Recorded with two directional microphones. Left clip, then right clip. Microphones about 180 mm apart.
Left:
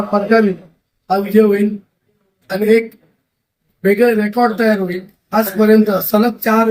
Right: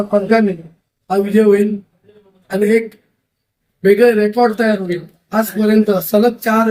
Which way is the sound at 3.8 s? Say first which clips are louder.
Right 2 dB; centre (ahead or behind).